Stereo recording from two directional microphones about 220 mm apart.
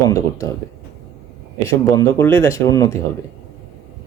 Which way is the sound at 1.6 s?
15° left (ahead or behind).